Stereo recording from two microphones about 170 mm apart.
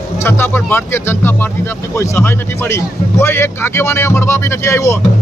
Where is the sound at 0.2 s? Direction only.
15° left (ahead or behind).